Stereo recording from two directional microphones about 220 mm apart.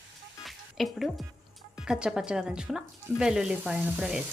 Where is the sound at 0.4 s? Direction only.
Centre (ahead or behind).